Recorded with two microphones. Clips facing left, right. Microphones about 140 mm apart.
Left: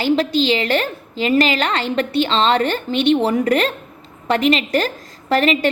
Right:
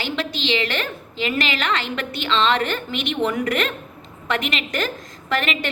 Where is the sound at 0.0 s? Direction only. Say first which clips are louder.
Left 9 dB; 35° left (ahead or behind).